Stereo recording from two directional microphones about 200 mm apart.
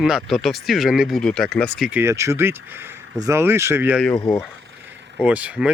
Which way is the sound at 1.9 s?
10° right (ahead or behind).